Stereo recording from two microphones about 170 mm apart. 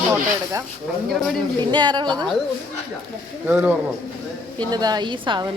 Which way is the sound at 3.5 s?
10° right (ahead or behind).